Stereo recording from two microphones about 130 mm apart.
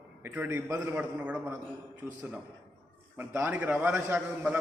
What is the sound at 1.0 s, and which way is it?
Speech, 10° right (ahead or behind).